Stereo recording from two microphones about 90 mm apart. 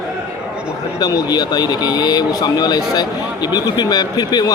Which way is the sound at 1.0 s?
45° left (ahead or behind).